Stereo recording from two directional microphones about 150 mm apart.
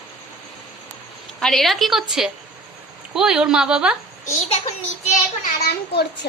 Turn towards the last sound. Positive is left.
turn(degrees=90)